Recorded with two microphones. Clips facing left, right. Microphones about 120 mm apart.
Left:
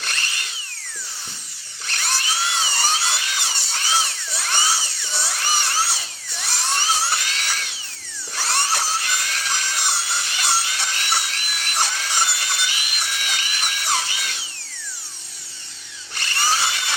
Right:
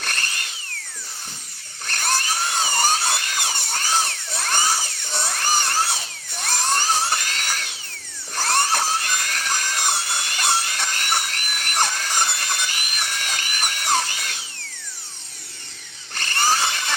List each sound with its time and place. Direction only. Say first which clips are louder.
0.0 s tools: right 1 dB; 50° right (ahead or behind)
1.9 s dental drill: right 3 dB; 50° right (ahead or behind)
16.1 s drill: right 2 dB; 50° right (ahead or behind)